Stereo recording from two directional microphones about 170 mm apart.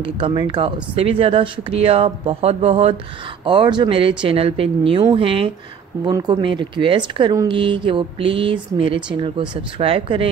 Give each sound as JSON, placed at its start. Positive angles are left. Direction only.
{"t": 0.0, "sound": "speech", "side_deg": -30}